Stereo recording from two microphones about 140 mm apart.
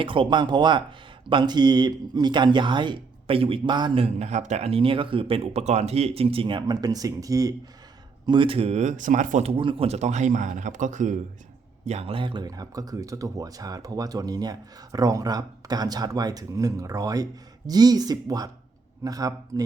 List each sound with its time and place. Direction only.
0.0 s speech: 35° right (ahead or behind)
8.3 s speech: 40° right (ahead or behind); by 9.5 s 60° right (ahead or behind)
9.5 s speech: 40° right (ahead or behind); by 11.2 s 60° right (ahead or behind)
11.9 s speech: 45° right (ahead or behind); by 19.6 s 25° right (ahead or behind)